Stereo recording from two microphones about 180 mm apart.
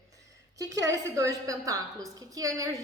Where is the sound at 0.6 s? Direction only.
20° right (ahead or behind).